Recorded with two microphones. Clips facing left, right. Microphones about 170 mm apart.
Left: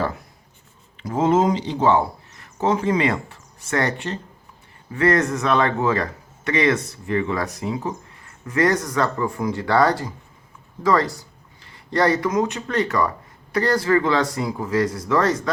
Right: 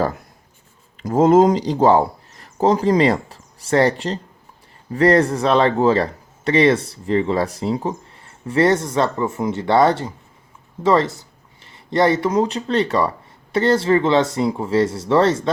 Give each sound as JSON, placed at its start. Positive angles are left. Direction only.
{"t": 0.9, "sound": "speech", "side_deg": -40}